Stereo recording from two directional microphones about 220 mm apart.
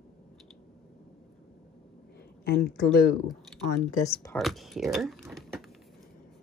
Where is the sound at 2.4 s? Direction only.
45° left (ahead or behind).